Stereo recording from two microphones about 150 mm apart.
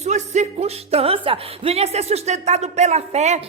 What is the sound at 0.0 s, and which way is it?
Speech, 50° right (ahead or behind).